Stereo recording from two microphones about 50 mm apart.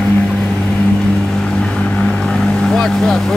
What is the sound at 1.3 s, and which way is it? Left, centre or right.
Boat, centre.